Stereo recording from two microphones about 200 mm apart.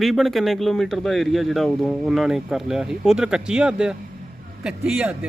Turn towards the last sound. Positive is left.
turn(degrees=-5)  # may be behind; listen again after turning